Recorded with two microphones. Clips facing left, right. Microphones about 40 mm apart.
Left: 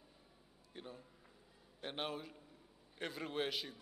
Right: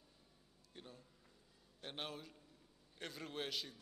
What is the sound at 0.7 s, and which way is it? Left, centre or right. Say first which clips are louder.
A man's voice: left 5 dB; centre.